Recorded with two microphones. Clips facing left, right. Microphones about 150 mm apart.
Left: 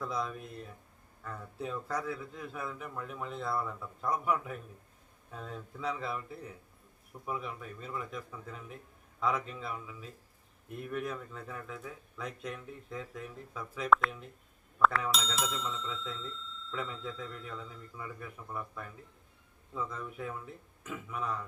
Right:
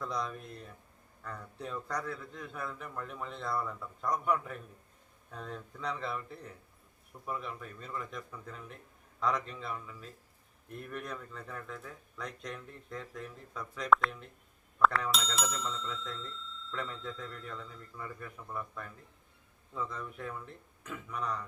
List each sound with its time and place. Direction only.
0.0 s speech: 5° left (ahead or behind)